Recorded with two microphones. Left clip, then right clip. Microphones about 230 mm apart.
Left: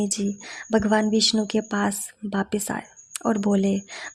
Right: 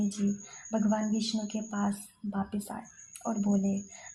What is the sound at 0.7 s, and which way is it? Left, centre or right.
Speech, left.